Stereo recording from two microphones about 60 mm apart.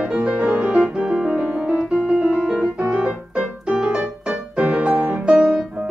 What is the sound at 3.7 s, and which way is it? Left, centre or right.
Music, centre.